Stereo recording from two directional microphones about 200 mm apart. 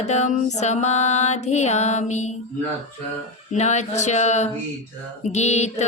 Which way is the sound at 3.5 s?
35° left (ahead or behind).